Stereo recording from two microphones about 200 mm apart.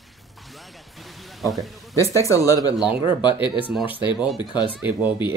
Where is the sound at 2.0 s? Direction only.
15° left (ahead or behind).